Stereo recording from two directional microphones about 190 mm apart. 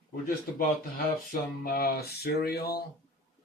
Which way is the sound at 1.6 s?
55° left (ahead or behind).